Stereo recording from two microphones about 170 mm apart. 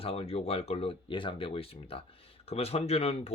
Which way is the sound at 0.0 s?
35° left (ahead or behind).